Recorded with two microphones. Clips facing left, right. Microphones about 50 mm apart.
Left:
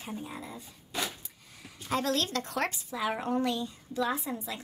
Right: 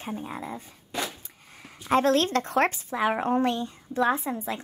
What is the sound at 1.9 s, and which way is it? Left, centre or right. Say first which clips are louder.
Speech: right 8 dB; right.